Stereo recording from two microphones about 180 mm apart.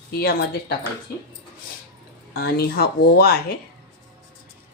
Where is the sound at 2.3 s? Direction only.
60° left (ahead or behind).